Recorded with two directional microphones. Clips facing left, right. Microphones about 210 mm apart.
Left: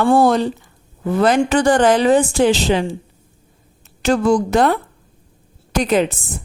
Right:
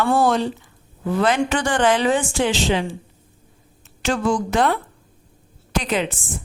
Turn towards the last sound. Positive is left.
turn(degrees=45)  # may be behind; listen again after turning